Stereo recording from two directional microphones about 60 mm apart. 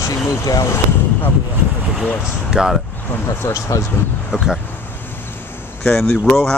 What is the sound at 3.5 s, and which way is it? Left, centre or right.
Speech, left.